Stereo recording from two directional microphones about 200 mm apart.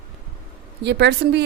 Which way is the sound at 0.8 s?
55° right (ahead or behind).